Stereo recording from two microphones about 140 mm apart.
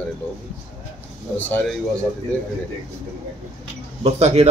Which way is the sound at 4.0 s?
45° right (ahead or behind).